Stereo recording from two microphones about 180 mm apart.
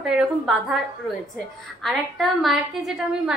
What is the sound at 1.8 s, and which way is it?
A woman's voice, centre (ahead or behind).